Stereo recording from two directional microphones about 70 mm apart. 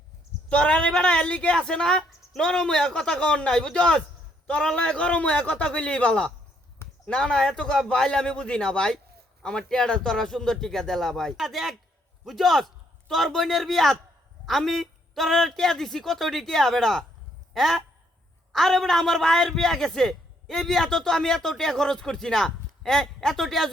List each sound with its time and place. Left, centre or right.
0.4 s a man's voice: centre